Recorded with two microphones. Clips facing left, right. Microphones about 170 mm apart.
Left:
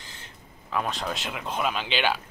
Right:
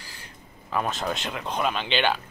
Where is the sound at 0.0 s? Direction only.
20° left (ahead or behind).